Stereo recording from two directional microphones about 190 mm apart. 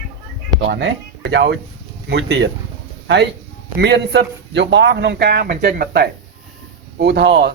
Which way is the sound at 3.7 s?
65° right (ahead or behind).